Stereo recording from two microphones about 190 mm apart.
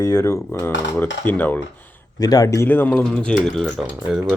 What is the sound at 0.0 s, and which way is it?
Speech, 15° left (ahead or behind).